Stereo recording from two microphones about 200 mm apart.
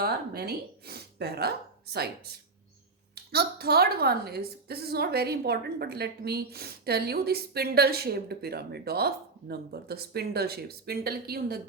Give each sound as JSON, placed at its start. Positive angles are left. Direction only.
{"t": 0.0, "sound": "speech", "side_deg": -50}
{"t": 3.3, "sound": "a woman's voice", "side_deg": -50}